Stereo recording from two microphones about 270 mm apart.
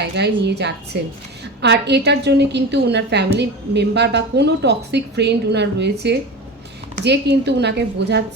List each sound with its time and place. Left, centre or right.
0.0 s a woman's voice: right